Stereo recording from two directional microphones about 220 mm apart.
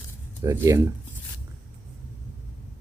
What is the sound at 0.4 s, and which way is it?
Speech, 15° right (ahead or behind).